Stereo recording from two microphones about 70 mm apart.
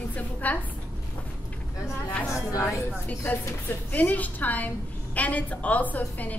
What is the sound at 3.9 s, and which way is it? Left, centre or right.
A woman's voice, left.